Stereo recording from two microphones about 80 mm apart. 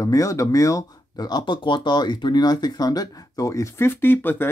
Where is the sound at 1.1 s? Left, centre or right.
Left.